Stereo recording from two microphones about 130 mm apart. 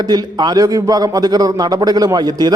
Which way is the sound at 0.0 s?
30° right (ahead or behind).